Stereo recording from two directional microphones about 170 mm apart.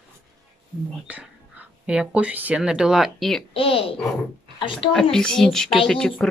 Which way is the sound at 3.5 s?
30° left (ahead or behind).